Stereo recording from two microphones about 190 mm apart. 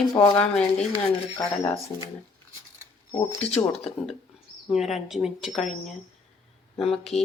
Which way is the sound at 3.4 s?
30° left (ahead or behind).